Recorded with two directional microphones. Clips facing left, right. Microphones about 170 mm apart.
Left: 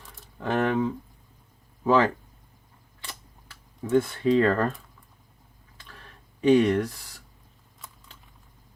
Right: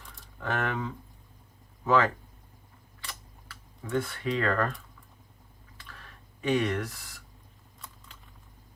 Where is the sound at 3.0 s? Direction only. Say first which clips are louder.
Left 1 dB; 25° left (ahead or behind).